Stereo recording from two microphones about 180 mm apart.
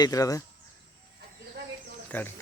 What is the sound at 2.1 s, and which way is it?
Speech, 10° left (ahead or behind).